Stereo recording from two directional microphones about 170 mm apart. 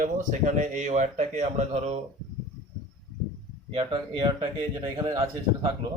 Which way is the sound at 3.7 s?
30° right (ahead or behind).